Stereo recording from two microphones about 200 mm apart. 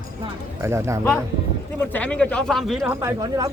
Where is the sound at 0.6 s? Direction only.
15° right (ahead or behind).